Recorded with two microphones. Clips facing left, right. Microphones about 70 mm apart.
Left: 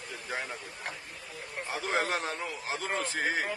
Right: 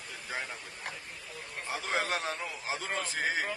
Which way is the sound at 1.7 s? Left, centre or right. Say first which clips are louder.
Left 2 dB; centre.